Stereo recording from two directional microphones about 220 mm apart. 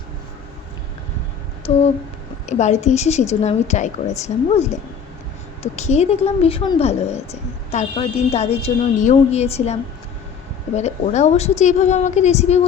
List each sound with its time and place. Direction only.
1.6 s a woman's voice: 25° left (ahead or behind)
5.7 s a woman's voice: 30° left (ahead or behind)
10.8 s a woman's voice: 30° left (ahead or behind)